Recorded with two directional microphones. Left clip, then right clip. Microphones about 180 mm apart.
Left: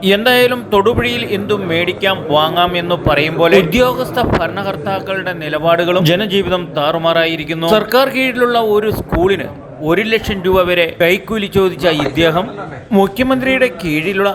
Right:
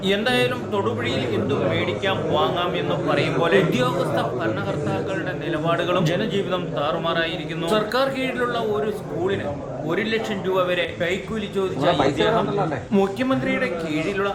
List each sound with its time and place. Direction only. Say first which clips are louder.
0.0 s speech: left 10 dB; 40° left (ahead or behind)
5.6 s speech: left 10 dB; 30° left (ahead or behind)
6.0 s speech: left 9 dB; 40° left (ahead or behind)